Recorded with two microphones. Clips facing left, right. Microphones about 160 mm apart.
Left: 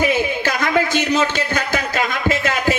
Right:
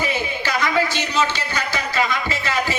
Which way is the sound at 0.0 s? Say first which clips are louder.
Left 6 dB; 50° left (ahead or behind).